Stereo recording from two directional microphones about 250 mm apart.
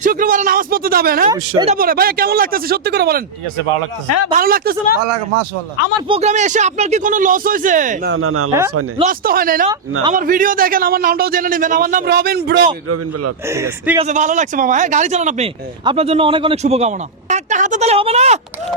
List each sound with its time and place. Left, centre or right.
0.0 s a man's voice: right
1.3 s a man's voice: centre
1.7 s a man's voice: right
4.3 s a man's voice: right
6.1 s a man's voice: right
8.1 s speech: right
9.0 s a man's voice: right
13.5 s a man's voice: centre
14.0 s speech: right